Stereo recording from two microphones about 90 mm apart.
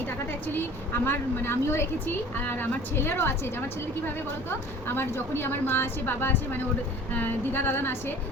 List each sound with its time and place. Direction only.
0.0 s vehicle: 20° left (ahead or behind)
1.0 s speech: 25° left (ahead or behind)